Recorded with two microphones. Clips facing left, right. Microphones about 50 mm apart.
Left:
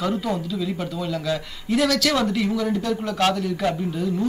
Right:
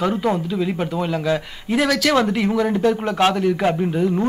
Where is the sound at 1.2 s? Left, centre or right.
Right.